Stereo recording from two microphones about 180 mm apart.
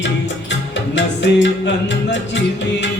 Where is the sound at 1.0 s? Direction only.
75° left (ahead or behind).